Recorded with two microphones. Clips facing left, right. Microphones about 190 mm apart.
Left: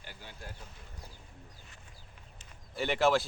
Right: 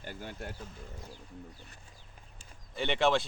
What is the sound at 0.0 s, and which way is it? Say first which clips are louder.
Speech: right 8 dB; 50° right (ahead or behind).